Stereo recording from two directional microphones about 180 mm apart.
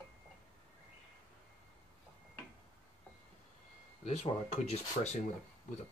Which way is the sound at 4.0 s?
35° left (ahead or behind).